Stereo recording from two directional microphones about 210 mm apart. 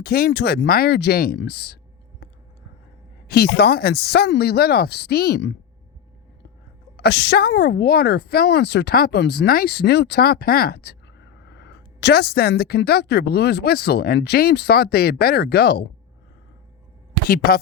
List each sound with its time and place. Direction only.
0.0 s a woman's voice: 45° left (ahead or behind)
3.2 s a woman's voice: 50° left (ahead or behind)
6.9 s a woman's voice: 55° left (ahead or behind)
17.2 s a woman's voice: 45° left (ahead or behind)